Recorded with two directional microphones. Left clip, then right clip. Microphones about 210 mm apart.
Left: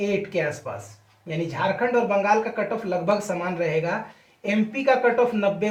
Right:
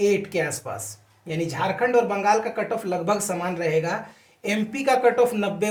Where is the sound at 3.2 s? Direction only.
40° right (ahead or behind).